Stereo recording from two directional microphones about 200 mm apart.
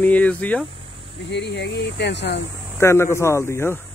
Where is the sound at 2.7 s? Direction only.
10° left (ahead or behind).